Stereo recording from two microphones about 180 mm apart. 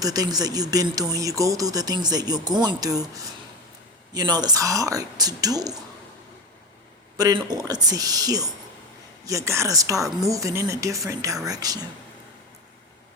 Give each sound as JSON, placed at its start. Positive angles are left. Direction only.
{"t": 0.0, "sound": "speech", "side_deg": -20}
{"t": 7.2, "sound": "speech", "side_deg": -20}